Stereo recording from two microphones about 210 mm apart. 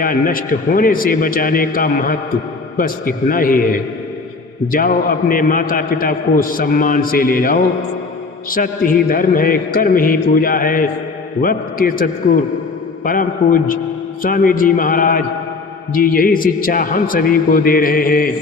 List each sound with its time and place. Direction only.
0.0 s a man's voice: 40° left (ahead or behind)